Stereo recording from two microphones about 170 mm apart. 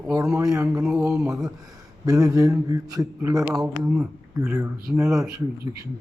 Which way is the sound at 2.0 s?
20° right (ahead or behind).